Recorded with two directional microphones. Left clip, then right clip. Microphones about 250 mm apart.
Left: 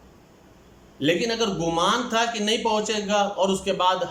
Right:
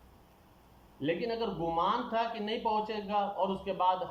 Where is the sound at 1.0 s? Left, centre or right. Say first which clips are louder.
Left 10 dB; left.